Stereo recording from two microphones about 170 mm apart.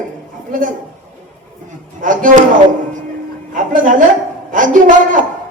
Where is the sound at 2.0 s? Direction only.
50° right (ahead or behind).